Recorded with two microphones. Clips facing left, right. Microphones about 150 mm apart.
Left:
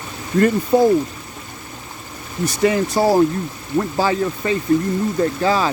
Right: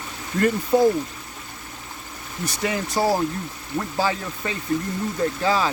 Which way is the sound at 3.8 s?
50° left (ahead or behind).